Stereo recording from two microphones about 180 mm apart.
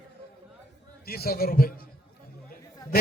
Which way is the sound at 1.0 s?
60° left (ahead or behind).